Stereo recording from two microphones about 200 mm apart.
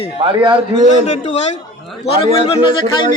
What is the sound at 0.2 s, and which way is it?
Speech, 25° right (ahead or behind).